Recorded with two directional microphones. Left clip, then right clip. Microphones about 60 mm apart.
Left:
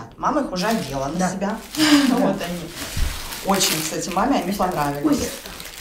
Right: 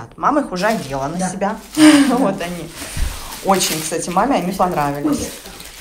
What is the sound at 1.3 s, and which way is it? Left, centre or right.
A woman's voice, left.